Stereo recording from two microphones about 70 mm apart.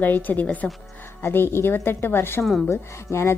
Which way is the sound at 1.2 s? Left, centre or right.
Left.